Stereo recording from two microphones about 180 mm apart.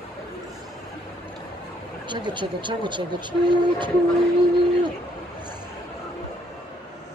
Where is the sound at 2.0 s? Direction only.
25° right (ahead or behind).